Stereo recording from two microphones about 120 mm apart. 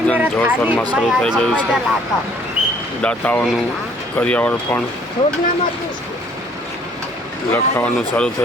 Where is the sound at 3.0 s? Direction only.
10° left (ahead or behind).